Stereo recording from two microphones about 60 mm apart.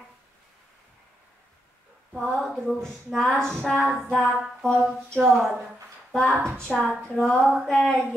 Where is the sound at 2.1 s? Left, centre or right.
Centre.